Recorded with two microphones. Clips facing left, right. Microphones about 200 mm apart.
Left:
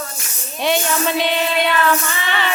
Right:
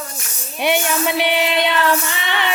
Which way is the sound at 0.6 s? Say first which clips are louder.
Even; 15° right (ahead or behind).